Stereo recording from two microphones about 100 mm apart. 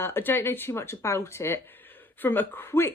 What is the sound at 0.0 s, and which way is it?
Speech, 25° left (ahead or behind).